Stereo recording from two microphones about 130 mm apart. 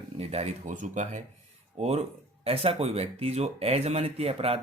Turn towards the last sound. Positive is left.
turn(degrees=-50)  # may be behind; listen again after turning